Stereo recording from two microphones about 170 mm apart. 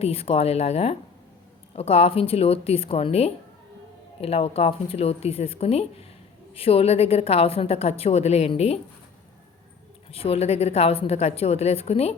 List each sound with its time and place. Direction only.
0.0 s a woman's voice: 35° left (ahead or behind)
10.1 s a woman's voice: 35° left (ahead or behind)